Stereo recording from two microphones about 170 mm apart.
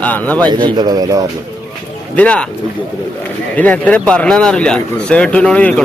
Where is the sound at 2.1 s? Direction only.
5° left (ahead or behind).